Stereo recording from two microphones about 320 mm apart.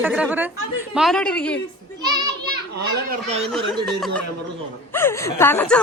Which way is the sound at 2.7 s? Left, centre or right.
Right.